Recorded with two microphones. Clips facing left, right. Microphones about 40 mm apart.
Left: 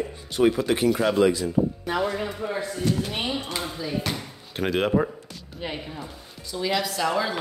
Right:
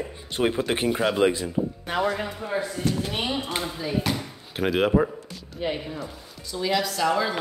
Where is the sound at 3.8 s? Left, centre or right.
Centre.